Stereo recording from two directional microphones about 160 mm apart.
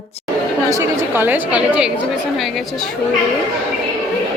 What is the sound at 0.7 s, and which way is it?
A woman's voice, 20° right (ahead or behind).